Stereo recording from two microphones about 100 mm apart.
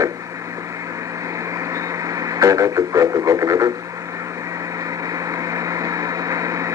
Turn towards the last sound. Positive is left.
turn(degrees=-30)  # may be behind; listen again after turning